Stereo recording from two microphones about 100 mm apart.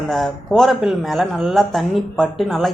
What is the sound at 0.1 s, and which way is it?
Speech, centre (ahead or behind).